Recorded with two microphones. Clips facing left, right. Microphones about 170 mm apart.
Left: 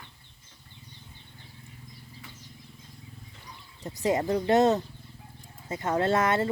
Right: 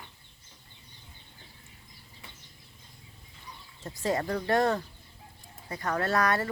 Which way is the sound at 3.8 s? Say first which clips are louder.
Left 3 dB; 20° left (ahead or behind).